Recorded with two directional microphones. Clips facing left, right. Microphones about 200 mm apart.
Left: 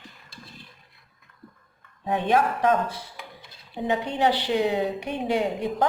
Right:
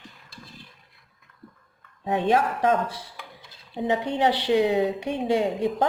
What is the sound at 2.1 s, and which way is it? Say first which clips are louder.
Speech: even; 25° right (ahead or behind).